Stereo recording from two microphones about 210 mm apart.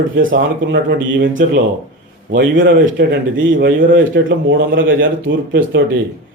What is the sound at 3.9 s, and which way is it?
A man's voice, 60° right (ahead or behind).